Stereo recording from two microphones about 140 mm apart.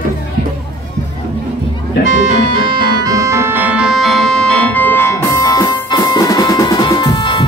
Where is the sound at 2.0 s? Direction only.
60° right (ahead or behind).